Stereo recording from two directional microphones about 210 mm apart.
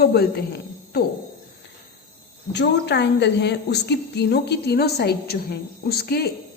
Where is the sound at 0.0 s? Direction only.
50° left (ahead or behind).